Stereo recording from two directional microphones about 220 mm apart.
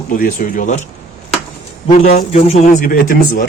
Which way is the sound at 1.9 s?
30° left (ahead or behind).